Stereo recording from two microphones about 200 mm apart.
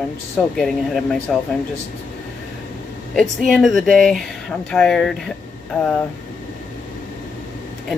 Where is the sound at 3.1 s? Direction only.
Centre (ahead or behind).